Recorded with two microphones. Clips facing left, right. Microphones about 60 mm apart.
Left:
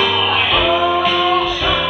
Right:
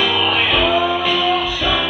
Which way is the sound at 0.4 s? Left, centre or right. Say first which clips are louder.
Left 1 dB; left.